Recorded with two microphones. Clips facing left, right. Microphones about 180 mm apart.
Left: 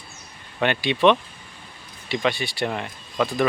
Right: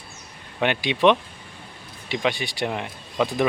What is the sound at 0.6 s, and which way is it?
Speech, 15° right (ahead or behind).